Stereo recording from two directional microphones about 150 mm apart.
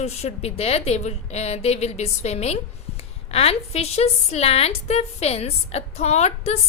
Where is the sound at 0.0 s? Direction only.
45° left (ahead or behind).